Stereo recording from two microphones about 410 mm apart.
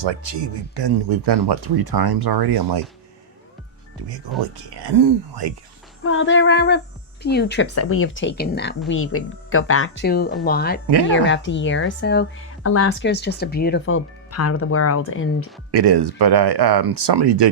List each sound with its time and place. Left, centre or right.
0.7 s speech: right
4.9 s speech: right
6.0 s speech: left
15.7 s speech: right